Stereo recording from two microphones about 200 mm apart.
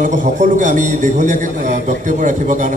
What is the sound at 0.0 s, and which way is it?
A man's voice, 40° right (ahead or behind).